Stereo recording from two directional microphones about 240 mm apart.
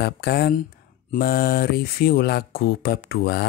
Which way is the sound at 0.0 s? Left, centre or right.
Left.